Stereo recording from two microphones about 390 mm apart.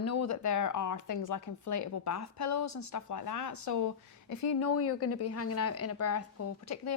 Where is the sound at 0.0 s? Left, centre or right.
Left.